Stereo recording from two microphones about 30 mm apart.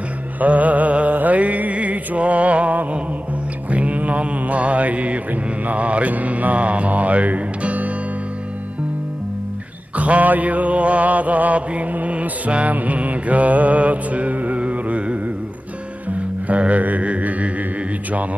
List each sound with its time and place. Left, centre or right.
0.4 s mantra: right
9.9 s mantra: right
14.6 s carnatic music: right
16.1 s music: right